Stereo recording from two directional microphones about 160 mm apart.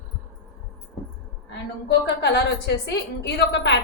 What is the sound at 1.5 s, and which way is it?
A woman's voice, 90° left.